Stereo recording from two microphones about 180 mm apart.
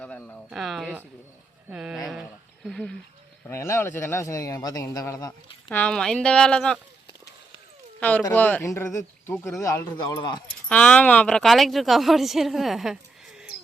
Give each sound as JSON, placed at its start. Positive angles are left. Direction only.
{"t": 0.0, "sound": "a sound", "side_deg": 5}
{"t": 2.6, "sound": "speech", "side_deg": 5}
{"t": 3.4, "sound": "a man's voice", "side_deg": 15}
{"t": 5.7, "sound": "speech", "side_deg": 5}
{"t": 7.9, "sound": "a man's voice", "side_deg": 10}
{"t": 10.7, "sound": "speech", "side_deg": 5}